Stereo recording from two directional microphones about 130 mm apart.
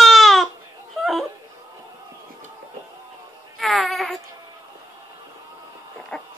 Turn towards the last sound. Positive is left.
turn(degrees=5)  # may be behind; listen again after turning